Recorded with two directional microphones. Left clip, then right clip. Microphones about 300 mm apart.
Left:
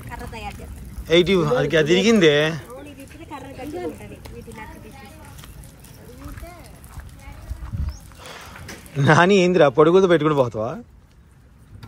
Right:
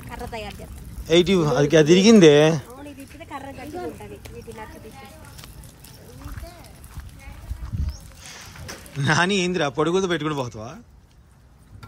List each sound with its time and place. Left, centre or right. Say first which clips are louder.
1.0 s speech: left 1 dB; centre
7.8 s a sound: left 2 dB; centre
8.9 s a man's voice: left 6 dB; centre